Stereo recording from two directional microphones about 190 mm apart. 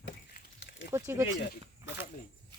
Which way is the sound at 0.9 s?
15° right (ahead or behind).